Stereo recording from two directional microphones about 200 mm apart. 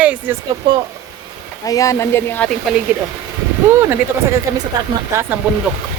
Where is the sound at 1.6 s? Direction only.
15° left (ahead or behind).